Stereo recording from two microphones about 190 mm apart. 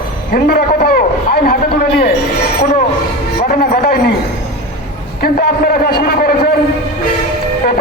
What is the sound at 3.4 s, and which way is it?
Speech, 45° left (ahead or behind).